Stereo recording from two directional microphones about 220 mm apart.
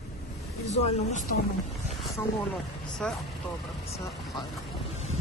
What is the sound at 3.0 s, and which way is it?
Speech, 5° left (ahead or behind).